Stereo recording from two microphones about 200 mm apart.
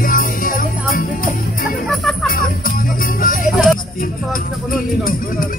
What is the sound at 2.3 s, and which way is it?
Music, 45° left (ahead or behind).